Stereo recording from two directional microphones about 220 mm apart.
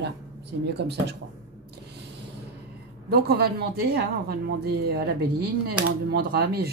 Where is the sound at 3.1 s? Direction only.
45° right (ahead or behind).